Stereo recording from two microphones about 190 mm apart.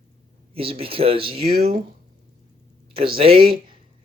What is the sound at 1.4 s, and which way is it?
Speech, 55° right (ahead or behind).